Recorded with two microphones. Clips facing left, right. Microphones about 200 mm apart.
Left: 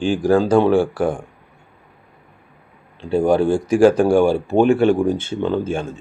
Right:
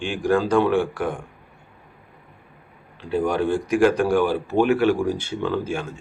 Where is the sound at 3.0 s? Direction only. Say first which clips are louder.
Left 6 dB; 30° left (ahead or behind).